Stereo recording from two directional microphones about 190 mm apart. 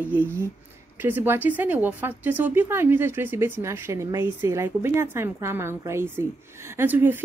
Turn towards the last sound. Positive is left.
turn(degrees=-10)  # may be behind; listen again after turning